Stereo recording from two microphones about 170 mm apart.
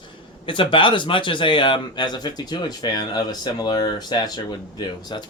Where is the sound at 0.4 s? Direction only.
30° left (ahead or behind).